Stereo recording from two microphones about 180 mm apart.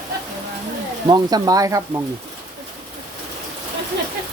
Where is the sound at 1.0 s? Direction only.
25° right (ahead or behind).